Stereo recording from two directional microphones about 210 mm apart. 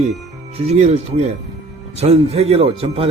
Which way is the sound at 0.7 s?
30° right (ahead or behind).